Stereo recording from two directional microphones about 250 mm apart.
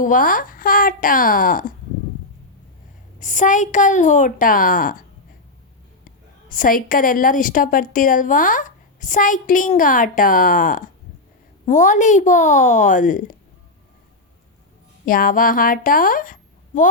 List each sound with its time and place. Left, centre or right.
0.0 s a woman's voice: left
3.2 s a woman's voice: left
6.1 s a woman's voice: left
15.0 s a woman's voice: left